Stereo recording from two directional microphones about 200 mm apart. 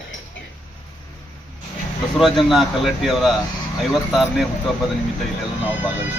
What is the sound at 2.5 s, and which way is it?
A man's voice, centre (ahead or behind).